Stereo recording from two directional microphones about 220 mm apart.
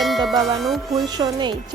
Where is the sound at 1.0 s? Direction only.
20° right (ahead or behind).